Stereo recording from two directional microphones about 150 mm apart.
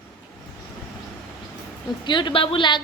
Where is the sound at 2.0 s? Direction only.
30° left (ahead or behind).